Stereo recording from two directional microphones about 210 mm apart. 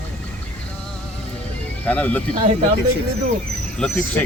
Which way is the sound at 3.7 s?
5° left (ahead or behind).